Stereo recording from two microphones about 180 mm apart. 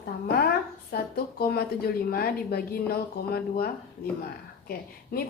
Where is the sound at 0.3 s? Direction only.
60° left (ahead or behind).